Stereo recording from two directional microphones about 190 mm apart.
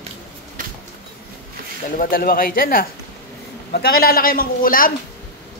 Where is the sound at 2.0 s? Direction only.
50° left (ahead or behind).